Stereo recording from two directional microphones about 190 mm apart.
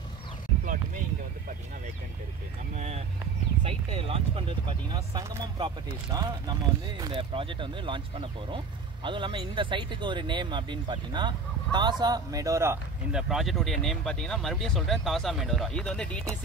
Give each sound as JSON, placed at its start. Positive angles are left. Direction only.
{"t": 2.7, "sound": "vehicle", "side_deg": -35}
{"t": 3.6, "sound": "a sound", "side_deg": -30}
{"t": 7.0, "sound": "speech", "side_deg": -25}
{"t": 13.1, "sound": "speech", "side_deg": 0}